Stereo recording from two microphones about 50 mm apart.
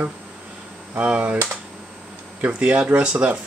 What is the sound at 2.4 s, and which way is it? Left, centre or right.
A man's voice, right.